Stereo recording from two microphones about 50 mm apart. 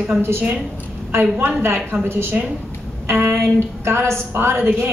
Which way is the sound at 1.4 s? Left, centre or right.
Right.